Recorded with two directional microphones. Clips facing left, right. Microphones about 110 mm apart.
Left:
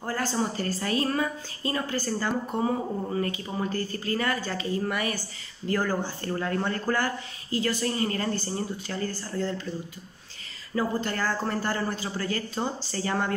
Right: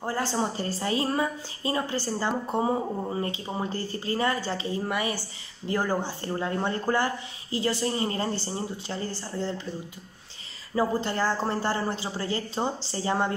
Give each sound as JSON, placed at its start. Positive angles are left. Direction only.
{"t": 0.0, "sound": "a woman's voice", "side_deg": -25}
{"t": 10.7, "sound": "a woman's voice", "side_deg": -25}